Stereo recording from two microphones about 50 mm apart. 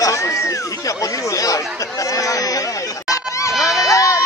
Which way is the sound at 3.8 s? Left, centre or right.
Left.